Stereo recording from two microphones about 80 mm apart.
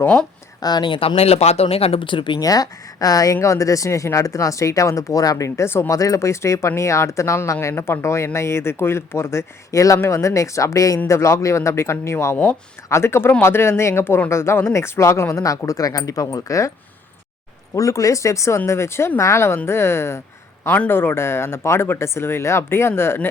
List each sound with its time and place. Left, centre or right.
0.6 s speech: left
1.6 s speech: left
2.4 s speech: left
5.9 s speech: left
17.7 s speech: left